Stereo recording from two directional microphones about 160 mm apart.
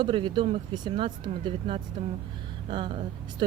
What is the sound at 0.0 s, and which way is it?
Speech, 30° right (ahead or behind).